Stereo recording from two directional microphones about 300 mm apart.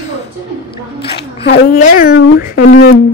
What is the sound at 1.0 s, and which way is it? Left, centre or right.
A woman's voice, left.